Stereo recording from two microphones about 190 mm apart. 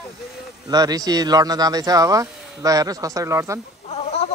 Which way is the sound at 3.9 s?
35° left (ahead or behind).